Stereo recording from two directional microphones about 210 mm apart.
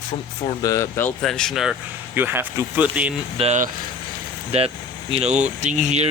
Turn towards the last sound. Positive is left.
turn(degrees=-35)  # may be behind; listen again after turning